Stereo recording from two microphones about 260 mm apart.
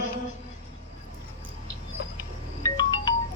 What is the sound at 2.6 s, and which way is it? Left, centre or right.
Music, centre.